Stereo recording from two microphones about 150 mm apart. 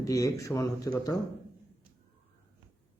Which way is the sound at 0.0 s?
20° left (ahead or behind).